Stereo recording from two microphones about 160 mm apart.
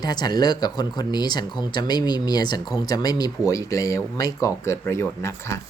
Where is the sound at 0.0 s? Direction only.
25° left (ahead or behind).